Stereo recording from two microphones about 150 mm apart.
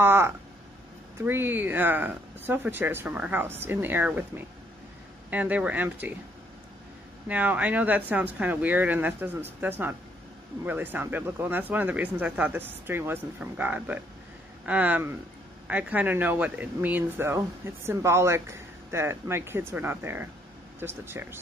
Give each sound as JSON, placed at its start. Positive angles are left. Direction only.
{"t": 0.0, "sound": "a sound", "side_deg": -15}
{"t": 1.2, "sound": "speech", "side_deg": -15}
{"t": 5.3, "sound": "speech", "side_deg": -10}
{"t": 7.2, "sound": "speech", "side_deg": -10}